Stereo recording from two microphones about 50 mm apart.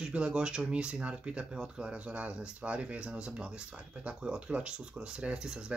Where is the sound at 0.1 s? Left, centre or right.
Right.